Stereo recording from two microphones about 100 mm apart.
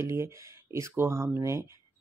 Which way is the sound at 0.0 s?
25° right (ahead or behind).